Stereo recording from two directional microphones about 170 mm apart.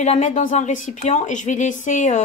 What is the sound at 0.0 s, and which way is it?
A woman's voice, 45° left (ahead or behind).